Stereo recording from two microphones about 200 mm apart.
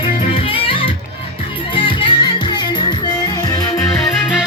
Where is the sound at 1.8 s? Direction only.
25° left (ahead or behind).